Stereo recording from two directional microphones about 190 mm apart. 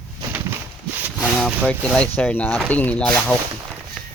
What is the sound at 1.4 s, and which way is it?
Speech, 5° left (ahead or behind).